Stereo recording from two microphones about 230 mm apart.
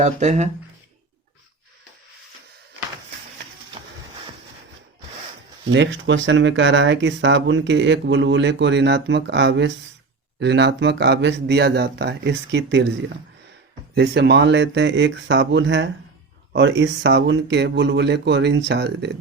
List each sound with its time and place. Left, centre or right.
0.0 s speech: right
5.6 s speech: right
13.9 s speech: right